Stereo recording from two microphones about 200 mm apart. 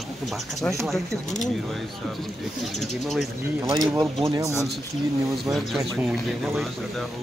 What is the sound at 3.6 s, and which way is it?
Speech, 20° right (ahead or behind).